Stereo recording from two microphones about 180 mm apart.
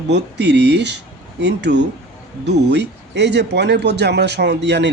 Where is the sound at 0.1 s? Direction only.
70° right (ahead or behind).